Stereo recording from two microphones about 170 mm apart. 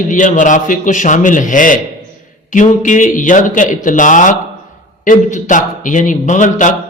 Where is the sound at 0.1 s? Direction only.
50° left (ahead or behind).